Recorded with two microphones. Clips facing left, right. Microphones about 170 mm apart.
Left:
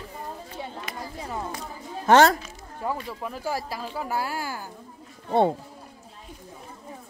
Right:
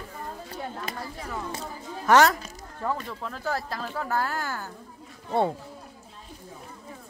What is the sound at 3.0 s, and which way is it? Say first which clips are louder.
Speech: left 1 dB; 10° left (ahead or behind).